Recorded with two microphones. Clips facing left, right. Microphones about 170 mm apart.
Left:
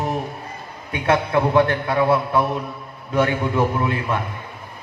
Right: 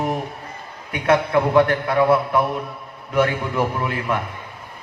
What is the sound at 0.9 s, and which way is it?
A man's voice, 25° left (ahead or behind).